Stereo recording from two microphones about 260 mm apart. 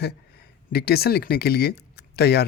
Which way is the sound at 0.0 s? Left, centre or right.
Left.